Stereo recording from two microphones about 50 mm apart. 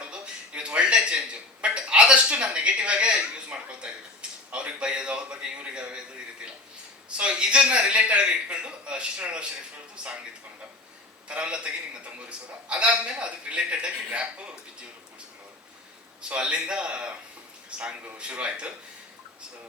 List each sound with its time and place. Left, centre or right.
0.0 s speech: right
7.2 s speech: centre
11.3 s speech: right
16.3 s speech: centre